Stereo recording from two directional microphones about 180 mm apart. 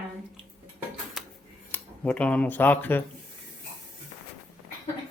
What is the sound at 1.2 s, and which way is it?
Cutlery, centre (ahead or behind).